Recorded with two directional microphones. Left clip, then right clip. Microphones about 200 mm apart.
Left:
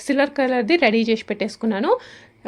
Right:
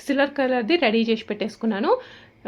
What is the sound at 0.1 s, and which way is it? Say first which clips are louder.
Speech: left 2 dB; 35° left (ahead or behind).